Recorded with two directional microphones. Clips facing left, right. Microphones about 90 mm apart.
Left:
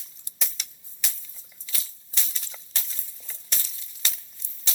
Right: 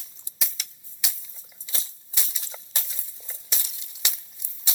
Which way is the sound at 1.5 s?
25° right (ahead or behind).